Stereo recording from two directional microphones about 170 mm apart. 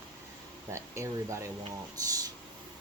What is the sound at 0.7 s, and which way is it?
Speech, 15° right (ahead or behind).